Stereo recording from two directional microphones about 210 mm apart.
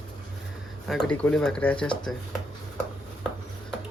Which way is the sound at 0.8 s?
Centre (ahead or behind).